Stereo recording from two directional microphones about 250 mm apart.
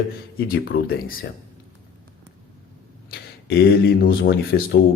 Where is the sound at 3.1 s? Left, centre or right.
Left.